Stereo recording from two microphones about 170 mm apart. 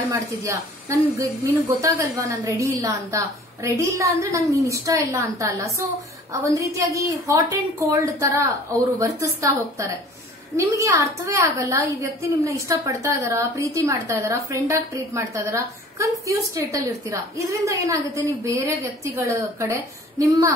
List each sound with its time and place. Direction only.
0.1 s a woman's voice: 15° right (ahead or behind)